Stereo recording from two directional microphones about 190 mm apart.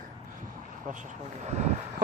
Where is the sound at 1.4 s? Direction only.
35° right (ahead or behind).